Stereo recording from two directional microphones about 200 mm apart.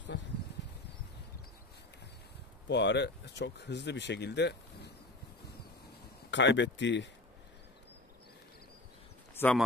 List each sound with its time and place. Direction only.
2.7 s speech: 60° left (ahead or behind)
6.3 s speech: 60° left (ahead or behind)
9.3 s a sound: 10° left (ahead or behind)